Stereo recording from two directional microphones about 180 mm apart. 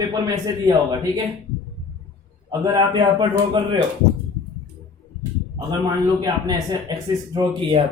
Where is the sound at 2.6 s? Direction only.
20° right (ahead or behind).